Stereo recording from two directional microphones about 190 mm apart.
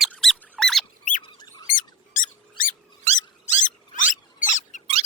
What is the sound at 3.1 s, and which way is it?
Mouse, 35° right (ahead or behind).